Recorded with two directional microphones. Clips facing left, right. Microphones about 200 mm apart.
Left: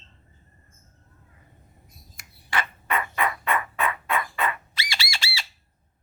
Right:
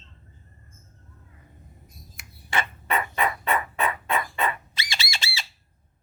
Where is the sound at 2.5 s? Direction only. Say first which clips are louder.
Right 1 dB; 25° right (ahead or behind).